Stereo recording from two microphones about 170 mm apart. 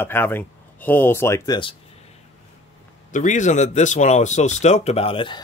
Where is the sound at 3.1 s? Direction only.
45° left (ahead or behind); by 5.4 s 30° left (ahead or behind).